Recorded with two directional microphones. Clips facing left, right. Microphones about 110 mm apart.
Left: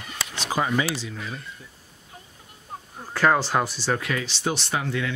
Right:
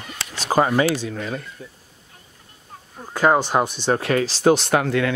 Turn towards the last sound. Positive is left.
turn(degrees=-65)  # may be behind; listen again after turning